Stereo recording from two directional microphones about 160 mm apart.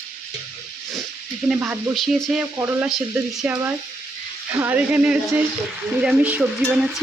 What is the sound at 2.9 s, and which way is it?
Stir, centre (ahead or behind).